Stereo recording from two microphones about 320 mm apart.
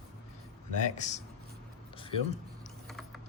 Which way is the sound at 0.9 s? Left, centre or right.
Left.